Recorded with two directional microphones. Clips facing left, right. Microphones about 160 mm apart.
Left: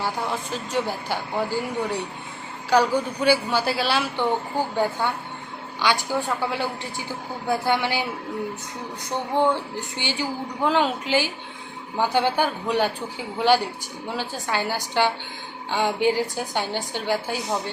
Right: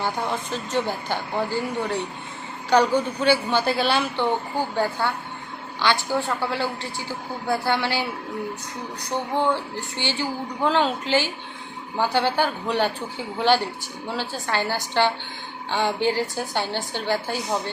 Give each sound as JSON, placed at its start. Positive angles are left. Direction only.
{"t": 0.0, "sound": "speech", "side_deg": 5}
{"t": 4.2, "sound": "speech", "side_deg": 15}
{"t": 9.3, "sound": "speech", "side_deg": 15}
{"t": 14.1, "sound": "speech", "side_deg": 15}